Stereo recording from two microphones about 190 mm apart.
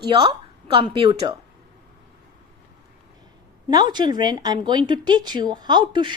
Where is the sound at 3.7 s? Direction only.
20° right (ahead or behind).